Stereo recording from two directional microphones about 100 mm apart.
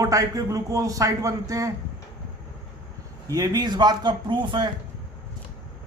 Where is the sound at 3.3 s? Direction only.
40° right (ahead or behind).